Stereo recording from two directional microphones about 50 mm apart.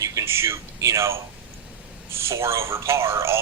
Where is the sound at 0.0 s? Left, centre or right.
Right.